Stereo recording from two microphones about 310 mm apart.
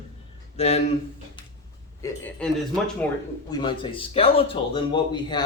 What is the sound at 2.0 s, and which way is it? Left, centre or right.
Speech, centre.